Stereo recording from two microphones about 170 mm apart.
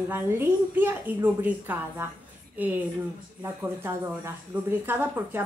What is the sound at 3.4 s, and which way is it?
A woman's voice, 15° right (ahead or behind).